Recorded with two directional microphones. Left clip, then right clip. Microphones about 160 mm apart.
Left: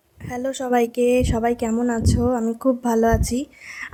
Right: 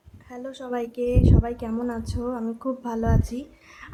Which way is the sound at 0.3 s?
40° left (ahead or behind).